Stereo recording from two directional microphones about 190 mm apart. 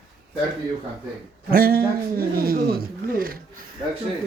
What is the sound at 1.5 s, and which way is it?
A man's voice, 50° right (ahead or behind).